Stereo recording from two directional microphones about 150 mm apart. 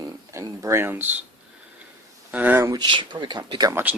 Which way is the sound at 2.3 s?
10° right (ahead or behind).